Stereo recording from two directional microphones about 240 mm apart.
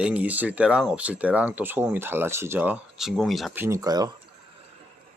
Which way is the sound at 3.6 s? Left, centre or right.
Centre.